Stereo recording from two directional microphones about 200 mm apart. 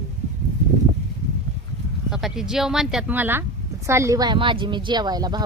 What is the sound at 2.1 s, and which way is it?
A woman's voice, centre (ahead or behind).